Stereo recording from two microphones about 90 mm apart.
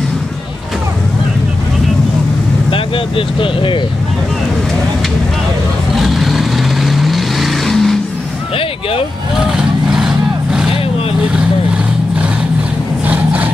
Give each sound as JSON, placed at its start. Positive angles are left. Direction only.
{"t": 2.7, "sound": "speech", "side_deg": 75}
{"t": 5.9, "sound": "vehicle", "side_deg": 0}
{"t": 9.4, "sound": "vehicle", "side_deg": -5}
{"t": 13.0, "sound": "vehicle", "side_deg": -15}